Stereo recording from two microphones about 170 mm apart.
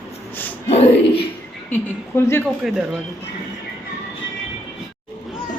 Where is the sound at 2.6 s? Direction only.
5° right (ahead or behind).